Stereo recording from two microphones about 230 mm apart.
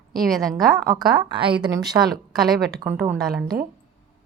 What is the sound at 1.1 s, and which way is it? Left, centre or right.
Speech, right.